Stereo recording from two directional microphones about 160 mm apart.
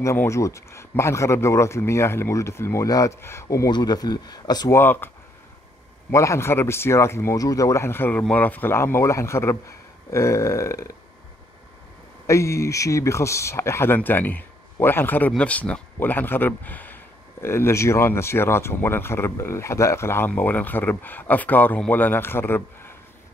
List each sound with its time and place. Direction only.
0.0 s speech: 20° left (ahead or behind)
6.1 s speech: 20° left (ahead or behind)
10.1 s burping: 20° left (ahead or behind)
12.3 s speech: 20° left (ahead or behind)